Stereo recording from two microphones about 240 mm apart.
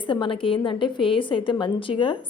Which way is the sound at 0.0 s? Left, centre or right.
Left.